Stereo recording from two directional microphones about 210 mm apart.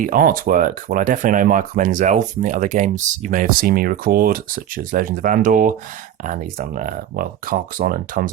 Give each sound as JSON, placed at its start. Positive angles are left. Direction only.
{"t": 0.0, "sound": "speech", "side_deg": -40}